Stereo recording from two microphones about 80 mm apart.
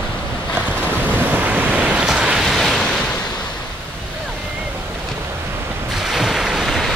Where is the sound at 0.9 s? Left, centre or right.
Right.